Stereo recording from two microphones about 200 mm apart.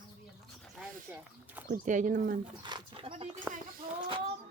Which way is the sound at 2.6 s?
20° right (ahead or behind).